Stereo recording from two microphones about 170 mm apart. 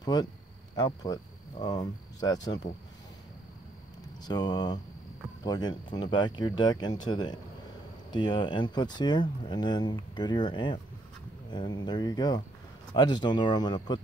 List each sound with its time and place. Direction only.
0.0 s speech: 25° left (ahead or behind)
4.2 s speech: 25° left (ahead or behind)